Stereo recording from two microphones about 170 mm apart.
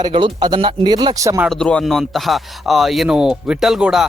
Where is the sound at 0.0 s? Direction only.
25° right (ahead or behind).